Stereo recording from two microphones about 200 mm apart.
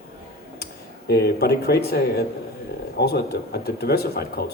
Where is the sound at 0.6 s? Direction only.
55° left (ahead or behind).